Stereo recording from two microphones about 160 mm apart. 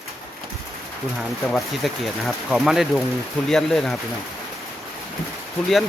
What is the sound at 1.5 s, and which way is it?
Speech, centre (ahead or behind).